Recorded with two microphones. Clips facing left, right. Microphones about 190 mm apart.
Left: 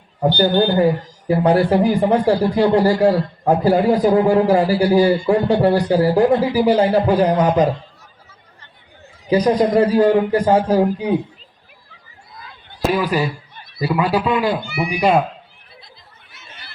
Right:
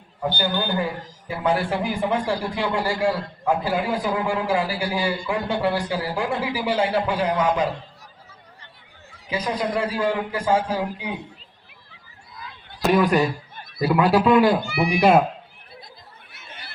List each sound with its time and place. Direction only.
0.2 s speech: 40° left (ahead or behind)
9.2 s speech: 40° left (ahead or behind)
12.8 s speech: 5° left (ahead or behind)
13.6 s a sound: 50° right (ahead or behind)
13.8 s speech: centre (ahead or behind)
16.3 s chatter: 55° right (ahead or behind)